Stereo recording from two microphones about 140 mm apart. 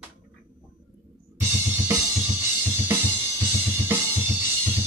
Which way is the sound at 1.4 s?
20° right (ahead or behind).